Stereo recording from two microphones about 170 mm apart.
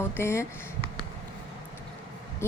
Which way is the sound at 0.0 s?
15° left (ahead or behind).